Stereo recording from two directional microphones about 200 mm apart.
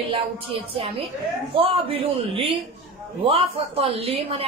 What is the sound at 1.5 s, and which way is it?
A man's voice, 25° right (ahead or behind).